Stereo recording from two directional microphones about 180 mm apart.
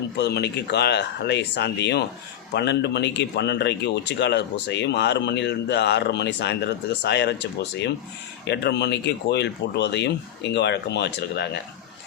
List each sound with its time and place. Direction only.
0.2 s speech: 65° left (ahead or behind)